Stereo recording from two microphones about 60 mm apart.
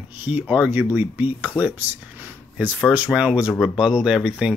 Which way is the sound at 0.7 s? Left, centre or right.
Right.